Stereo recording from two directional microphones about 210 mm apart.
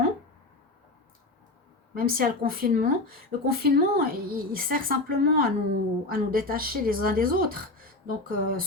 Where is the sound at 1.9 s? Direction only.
45° right (ahead or behind).